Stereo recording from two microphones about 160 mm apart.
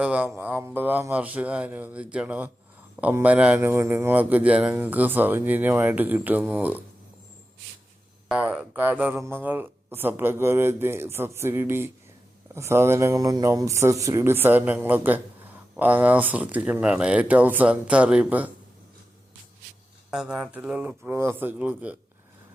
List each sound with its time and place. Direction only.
0.0 s speech: 10° right (ahead or behind)
8.3 s speech: 5° right (ahead or behind)
20.1 s speech: 5° right (ahead or behind)